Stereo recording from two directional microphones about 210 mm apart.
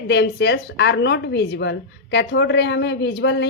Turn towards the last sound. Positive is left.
turn(degrees=55)  # may be behind; listen again after turning